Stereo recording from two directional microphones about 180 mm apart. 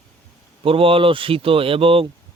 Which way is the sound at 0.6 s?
30° right (ahead or behind).